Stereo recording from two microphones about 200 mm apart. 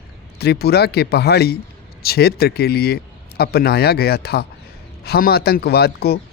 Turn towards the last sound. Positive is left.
turn(degrees=50)  # may be behind; listen again after turning